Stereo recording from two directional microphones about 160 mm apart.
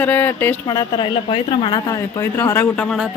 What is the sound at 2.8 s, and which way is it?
Speech, 5° right (ahead or behind).